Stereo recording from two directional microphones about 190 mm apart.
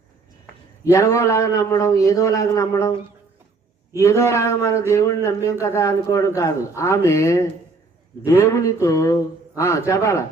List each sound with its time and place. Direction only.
0.9 s a man's voice: 15° left (ahead or behind)
3.9 s a man's voice: 15° left (ahead or behind)
8.4 s a man's voice: 15° left (ahead or behind)